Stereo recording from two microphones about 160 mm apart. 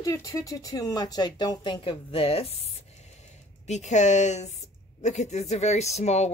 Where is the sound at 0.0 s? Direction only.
20° left (ahead or behind).